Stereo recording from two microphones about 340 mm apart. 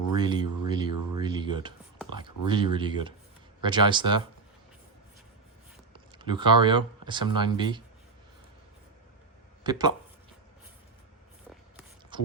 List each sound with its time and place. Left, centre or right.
0.2 s speech: centre
5.9 s speech: centre
9.6 s speech: centre
12.1 s a sound: centre